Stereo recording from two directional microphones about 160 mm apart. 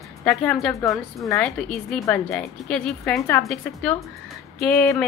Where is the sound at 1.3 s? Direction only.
5° left (ahead or behind).